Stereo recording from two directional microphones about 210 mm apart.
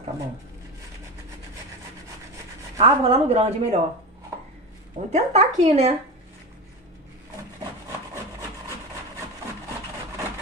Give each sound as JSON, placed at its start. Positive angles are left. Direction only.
{"t": 2.8, "sound": "a woman's voice", "side_deg": -25}
{"t": 5.1, "sound": "speech", "side_deg": -35}